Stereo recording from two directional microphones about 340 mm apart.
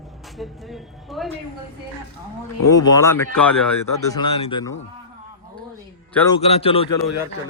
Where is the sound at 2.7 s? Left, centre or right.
Centre.